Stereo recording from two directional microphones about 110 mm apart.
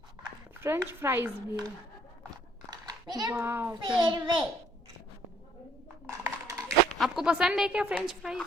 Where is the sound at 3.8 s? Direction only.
45° right (ahead or behind).